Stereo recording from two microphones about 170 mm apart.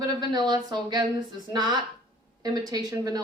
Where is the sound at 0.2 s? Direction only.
25° right (ahead or behind).